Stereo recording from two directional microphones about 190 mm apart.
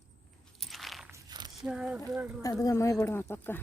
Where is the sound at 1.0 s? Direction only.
15° right (ahead or behind).